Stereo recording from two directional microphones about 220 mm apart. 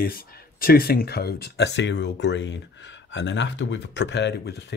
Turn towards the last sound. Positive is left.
turn(degrees=50)  # may be behind; listen again after turning